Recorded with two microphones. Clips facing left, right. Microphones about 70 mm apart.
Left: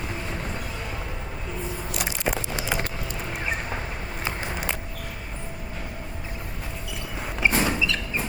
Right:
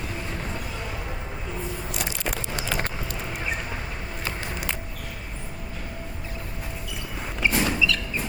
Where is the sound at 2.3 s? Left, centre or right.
Centre.